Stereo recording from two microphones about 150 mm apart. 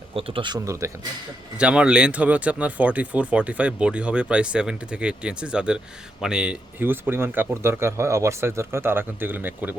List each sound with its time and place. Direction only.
0.1 s speech: 40° right (ahead or behind); by 0.9 s 20° right (ahead or behind)
1.5 s speech: 5° right (ahead or behind)